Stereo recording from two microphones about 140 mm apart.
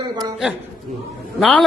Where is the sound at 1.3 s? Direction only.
10° left (ahead or behind).